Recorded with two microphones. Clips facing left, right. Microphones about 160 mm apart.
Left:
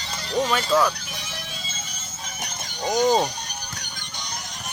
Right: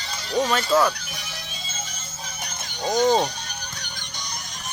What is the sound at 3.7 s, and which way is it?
Music, 50° left (ahead or behind).